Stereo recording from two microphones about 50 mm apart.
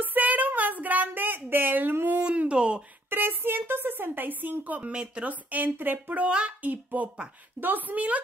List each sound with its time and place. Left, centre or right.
0.0 s a sound: right
2.1 s a sound: right
3.1 s speech: right
4.9 s speech: right
6.2 s a child's voice: right
6.6 s speech: right